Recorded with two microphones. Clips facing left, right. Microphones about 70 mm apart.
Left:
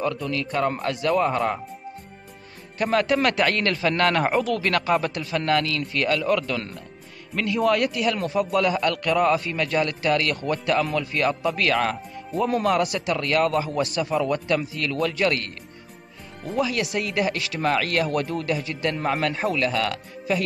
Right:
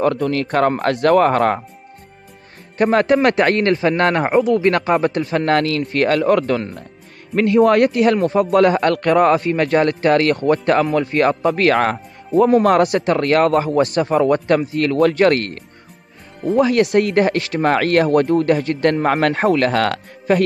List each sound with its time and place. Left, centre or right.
0.0 s speech: right
2.8 s a man's voice: right